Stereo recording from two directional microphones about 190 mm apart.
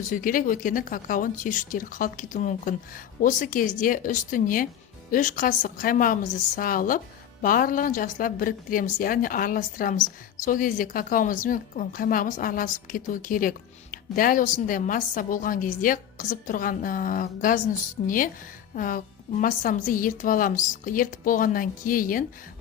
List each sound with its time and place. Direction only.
0.1 s a woman's voice: 45° left (ahead or behind)